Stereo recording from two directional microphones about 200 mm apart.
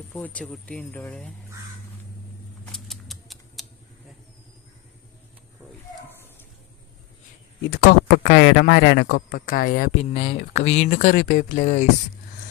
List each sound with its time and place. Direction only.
0.1 s speech: 5° left (ahead or behind)
2.7 s typewriter: centre (ahead or behind)
7.7 s speech: 50° left (ahead or behind)
10.0 s speech: 30° left (ahead or behind)